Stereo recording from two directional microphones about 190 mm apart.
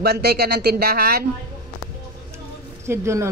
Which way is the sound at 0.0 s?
55° right (ahead or behind).